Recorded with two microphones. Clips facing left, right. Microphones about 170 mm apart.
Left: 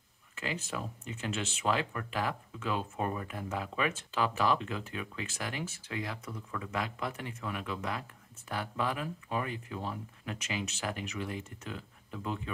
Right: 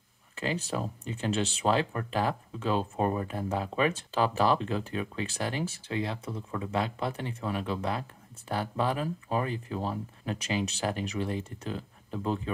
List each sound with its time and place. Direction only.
0.4 s speech: 35° right (ahead or behind)